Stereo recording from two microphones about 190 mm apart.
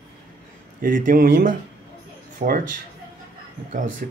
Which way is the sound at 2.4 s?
35° right (ahead or behind).